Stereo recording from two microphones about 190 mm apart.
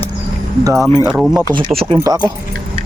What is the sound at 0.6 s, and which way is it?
Speech, 15° right (ahead or behind).